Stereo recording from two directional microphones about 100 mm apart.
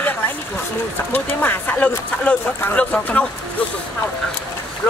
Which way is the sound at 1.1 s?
20° left (ahead or behind).